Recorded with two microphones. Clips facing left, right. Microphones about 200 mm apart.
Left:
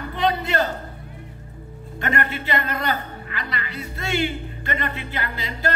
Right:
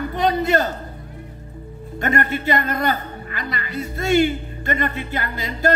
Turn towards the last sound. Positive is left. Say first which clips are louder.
# right 4 dB
turn(degrees=-45)  # may be behind; listen again after turning